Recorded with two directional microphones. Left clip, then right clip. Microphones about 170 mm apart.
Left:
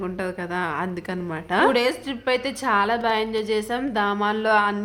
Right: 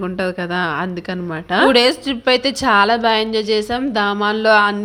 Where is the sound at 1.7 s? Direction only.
40° right (ahead or behind).